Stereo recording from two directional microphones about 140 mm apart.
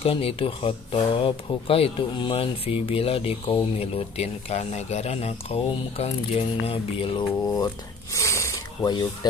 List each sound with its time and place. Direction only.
0.0 s speech: 40° left (ahead or behind)